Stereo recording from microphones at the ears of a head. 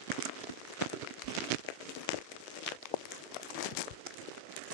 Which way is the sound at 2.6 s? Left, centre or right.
Left.